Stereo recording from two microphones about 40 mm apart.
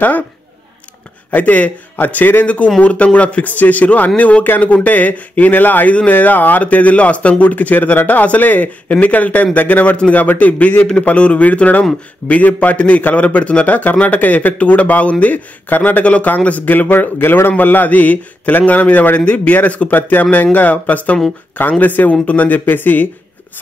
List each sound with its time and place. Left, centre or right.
1.3 s speech: left
2.0 s speech: left
2.4 s speech: left
11.0 s speech: left
16.9 s speech: left
19.2 s speech: left
20.0 s speech: left
22.7 s speech: left